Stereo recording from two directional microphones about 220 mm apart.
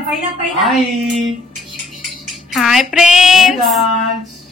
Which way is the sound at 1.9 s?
Centre (ahead or behind).